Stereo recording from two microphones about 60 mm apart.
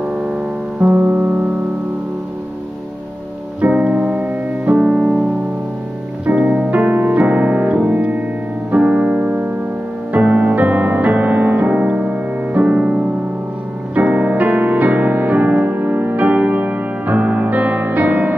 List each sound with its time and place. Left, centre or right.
0.1 s music: centre
3.6 s music: right
4.7 s music: centre
6.2 s piano: right
10.1 s music: right